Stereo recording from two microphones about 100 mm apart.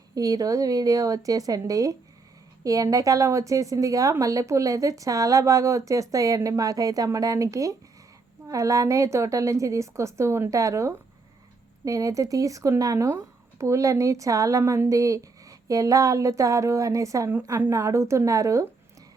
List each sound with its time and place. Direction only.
0.1 s a woman's voice: 35° right (ahead or behind)